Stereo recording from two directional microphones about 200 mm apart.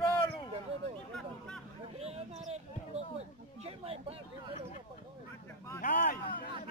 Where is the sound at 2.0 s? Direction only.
30° right (ahead or behind).